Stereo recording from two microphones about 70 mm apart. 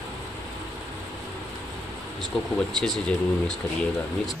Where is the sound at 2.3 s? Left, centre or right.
Centre.